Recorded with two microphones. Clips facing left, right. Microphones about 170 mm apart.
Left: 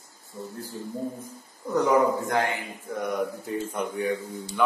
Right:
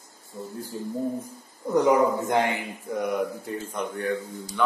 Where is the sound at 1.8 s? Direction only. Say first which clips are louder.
Right 1 dB; 20° right (ahead or behind).